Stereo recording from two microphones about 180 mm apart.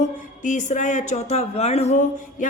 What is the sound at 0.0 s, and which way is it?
A man's voice, 45° left (ahead or behind).